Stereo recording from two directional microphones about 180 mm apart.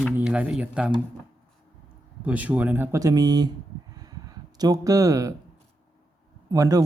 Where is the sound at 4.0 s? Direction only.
20° right (ahead or behind).